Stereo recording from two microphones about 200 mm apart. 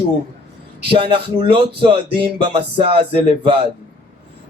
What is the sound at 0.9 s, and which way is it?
Speech, 25° right (ahead or behind).